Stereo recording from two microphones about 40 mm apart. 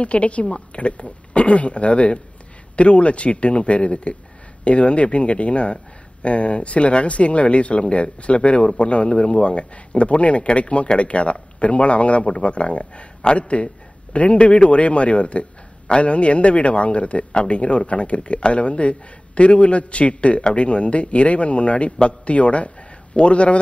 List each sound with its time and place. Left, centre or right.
0.0 s a woman's voice: left